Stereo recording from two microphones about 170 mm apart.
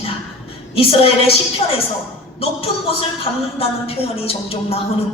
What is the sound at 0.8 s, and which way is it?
Speech, 35° left (ahead or behind).